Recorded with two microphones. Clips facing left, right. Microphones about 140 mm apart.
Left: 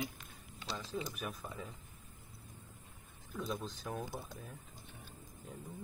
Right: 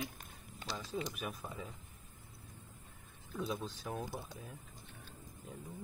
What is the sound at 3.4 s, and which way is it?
Speech, centre (ahead or behind).